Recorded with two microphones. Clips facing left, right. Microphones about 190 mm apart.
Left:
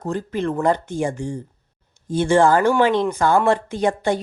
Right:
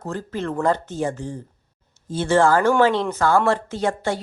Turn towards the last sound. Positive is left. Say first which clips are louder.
# left 3 dB
turn(degrees=15)  # may be behind; listen again after turning